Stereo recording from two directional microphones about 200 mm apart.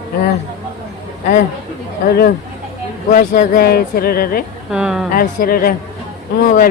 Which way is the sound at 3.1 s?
40° left (ahead or behind).